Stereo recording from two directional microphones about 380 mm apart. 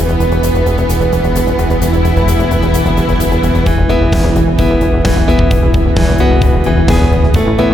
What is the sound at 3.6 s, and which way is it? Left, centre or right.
Music, centre.